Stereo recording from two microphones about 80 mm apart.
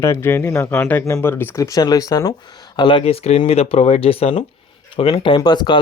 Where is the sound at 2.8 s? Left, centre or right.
Left.